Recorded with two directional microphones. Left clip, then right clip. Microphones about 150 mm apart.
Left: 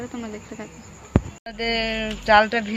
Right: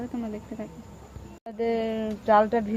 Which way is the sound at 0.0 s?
5° right (ahead or behind).